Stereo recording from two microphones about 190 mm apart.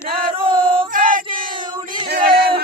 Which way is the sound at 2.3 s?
55° right (ahead or behind).